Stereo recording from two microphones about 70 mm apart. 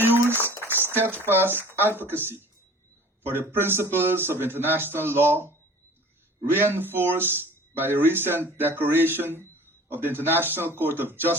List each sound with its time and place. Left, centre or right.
0.0 s a sound: right
0.8 s speech: right
6.5 s speech: right